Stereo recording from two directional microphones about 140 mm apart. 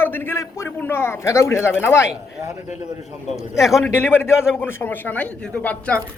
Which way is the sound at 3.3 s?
Centre (ahead or behind).